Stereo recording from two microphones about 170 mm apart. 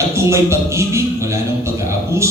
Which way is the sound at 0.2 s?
15° right (ahead or behind).